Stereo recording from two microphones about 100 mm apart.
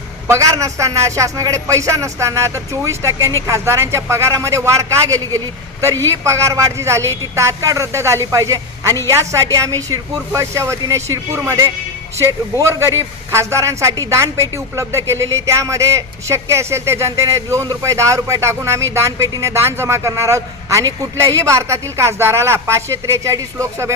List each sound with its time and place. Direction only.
0.3 s a man's voice: 30° right (ahead or behind)